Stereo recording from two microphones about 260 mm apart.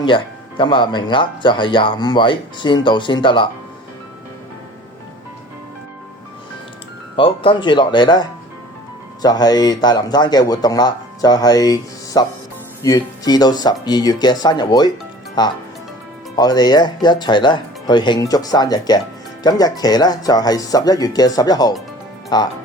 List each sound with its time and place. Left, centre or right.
0.0 s speech: centre
7.2 s speech: centre